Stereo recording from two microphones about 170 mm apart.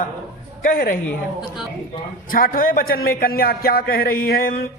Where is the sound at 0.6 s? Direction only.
55° left (ahead or behind).